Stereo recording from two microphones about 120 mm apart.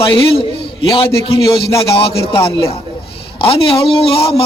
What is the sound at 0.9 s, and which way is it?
Speech, 45° left (ahead or behind).